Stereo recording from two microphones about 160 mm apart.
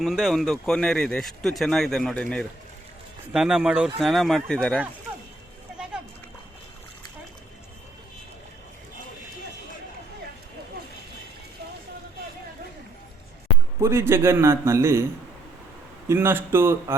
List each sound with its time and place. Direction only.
0.0 s speech: centre (ahead or behind)
13.8 s a man's voice: 15° right (ahead or behind)
16.0 s a man's voice: 15° right (ahead or behind)